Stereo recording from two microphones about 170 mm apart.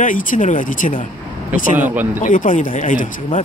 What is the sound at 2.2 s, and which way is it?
Speech, 50° left (ahead or behind).